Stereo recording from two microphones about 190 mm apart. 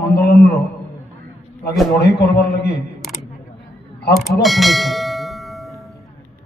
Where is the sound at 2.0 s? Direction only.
60° left (ahead or behind).